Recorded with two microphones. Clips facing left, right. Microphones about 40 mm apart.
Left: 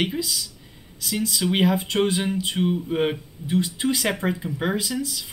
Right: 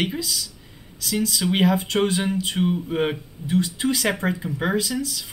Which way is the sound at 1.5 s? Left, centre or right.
Centre.